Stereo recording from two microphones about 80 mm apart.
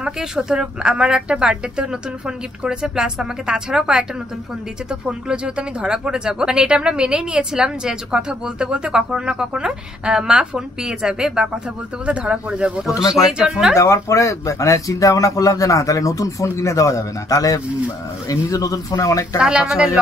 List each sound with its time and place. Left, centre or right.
0.0 s speech: centre
5.0 s speech: centre
13.7 s speech: left
19.3 s speech: centre